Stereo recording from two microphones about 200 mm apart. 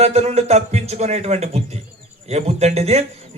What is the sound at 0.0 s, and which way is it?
Speech, 30° right (ahead or behind).